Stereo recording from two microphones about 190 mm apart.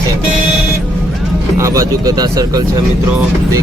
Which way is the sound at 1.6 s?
15° right (ahead or behind).